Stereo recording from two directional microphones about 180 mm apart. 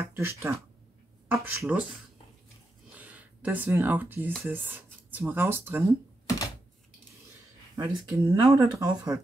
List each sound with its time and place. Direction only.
0.0 s speech: 15° right (ahead or behind)
3.0 s speech: 10° right (ahead or behind)
7.7 s speech: 15° right (ahead or behind)